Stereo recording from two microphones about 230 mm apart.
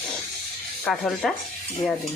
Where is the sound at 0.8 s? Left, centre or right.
Centre.